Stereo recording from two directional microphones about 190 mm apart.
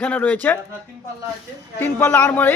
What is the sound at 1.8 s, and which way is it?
Speech, 10° left (ahead or behind).